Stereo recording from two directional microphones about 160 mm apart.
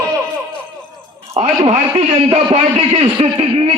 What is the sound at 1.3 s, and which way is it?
A man's voice, 35° right (ahead or behind).